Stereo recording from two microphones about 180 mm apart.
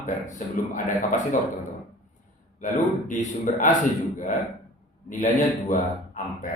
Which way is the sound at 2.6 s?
45° left (ahead or behind).